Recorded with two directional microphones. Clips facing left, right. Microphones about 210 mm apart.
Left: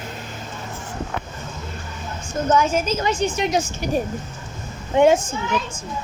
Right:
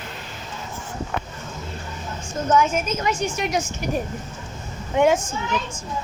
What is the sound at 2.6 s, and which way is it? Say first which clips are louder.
A woman's voice: left 1 dB; 35° left (ahead or behind).